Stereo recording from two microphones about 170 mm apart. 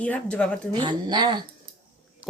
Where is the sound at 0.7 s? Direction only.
25° right (ahead or behind).